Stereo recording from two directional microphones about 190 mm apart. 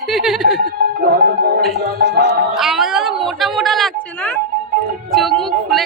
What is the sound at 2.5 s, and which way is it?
A woman's voice, centre (ahead or behind).